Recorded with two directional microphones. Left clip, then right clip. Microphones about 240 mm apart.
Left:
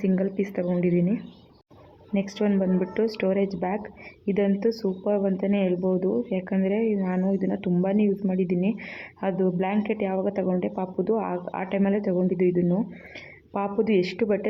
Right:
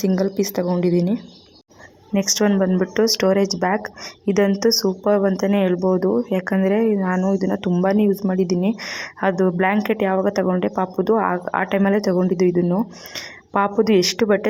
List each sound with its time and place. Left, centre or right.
0.0 s speech: centre